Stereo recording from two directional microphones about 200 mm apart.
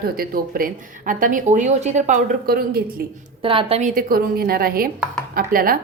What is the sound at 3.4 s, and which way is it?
A woman's voice, 25° right (ahead or behind).